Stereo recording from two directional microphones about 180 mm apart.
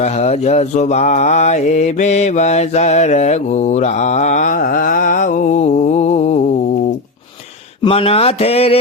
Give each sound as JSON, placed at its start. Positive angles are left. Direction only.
{"t": 0.0, "sound": "mantra", "side_deg": 40}
{"t": 7.8, "sound": "mantra", "side_deg": 30}